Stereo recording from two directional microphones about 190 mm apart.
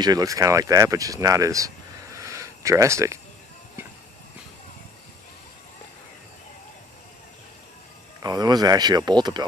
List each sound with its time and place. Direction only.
0.0 s speech: 20° right (ahead or behind)
2.1 s a sound: 15° right (ahead or behind)
8.2 s speech: 20° right (ahead or behind)